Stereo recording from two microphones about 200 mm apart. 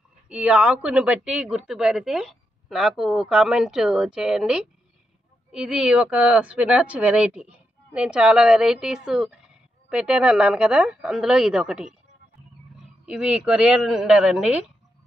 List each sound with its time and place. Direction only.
0.3 s speech: 5° right (ahead or behind)
13.0 s speech: 5° right (ahead or behind)